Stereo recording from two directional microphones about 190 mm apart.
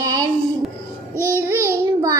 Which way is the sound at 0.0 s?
20° right (ahead or behind).